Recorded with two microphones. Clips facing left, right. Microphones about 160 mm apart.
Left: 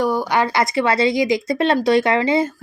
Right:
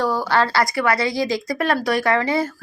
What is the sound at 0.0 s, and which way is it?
A woman's voice, 15° left (ahead or behind).